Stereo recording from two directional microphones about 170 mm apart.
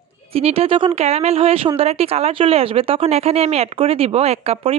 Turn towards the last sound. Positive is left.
turn(degrees=-35)  # may be behind; listen again after turning